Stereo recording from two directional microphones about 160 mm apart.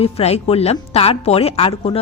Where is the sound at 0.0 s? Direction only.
40° left (ahead or behind).